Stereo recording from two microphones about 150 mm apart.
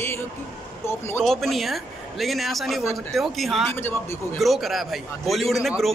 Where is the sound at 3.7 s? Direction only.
15° left (ahead or behind).